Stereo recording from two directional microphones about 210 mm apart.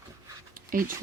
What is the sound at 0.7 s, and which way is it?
Speech, 40° right (ahead or behind).